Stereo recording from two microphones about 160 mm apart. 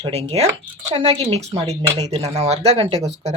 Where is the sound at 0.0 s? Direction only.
35° right (ahead or behind).